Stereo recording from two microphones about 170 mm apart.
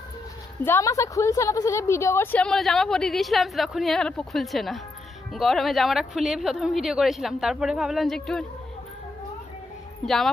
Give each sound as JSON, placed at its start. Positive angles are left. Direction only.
{"t": 0.7, "sound": "a woman's voice", "side_deg": 15}
{"t": 2.4, "sound": "speech", "side_deg": 0}
{"t": 10.0, "sound": "speech", "side_deg": 0}